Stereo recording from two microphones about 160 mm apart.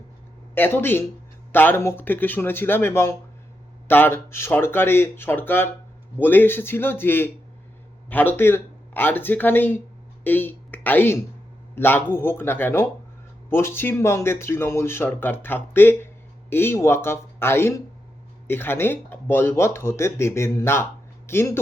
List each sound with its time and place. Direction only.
0.5 s a woman's voice: 15° left (ahead or behind)